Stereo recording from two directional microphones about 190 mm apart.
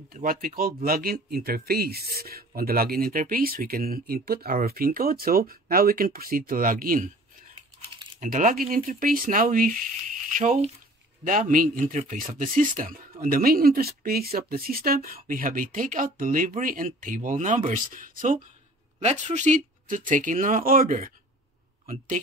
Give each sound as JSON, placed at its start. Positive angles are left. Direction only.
{"t": 0.1, "sound": "a man's voice", "side_deg": -50}
{"t": 8.2, "sound": "a man's voice", "side_deg": -45}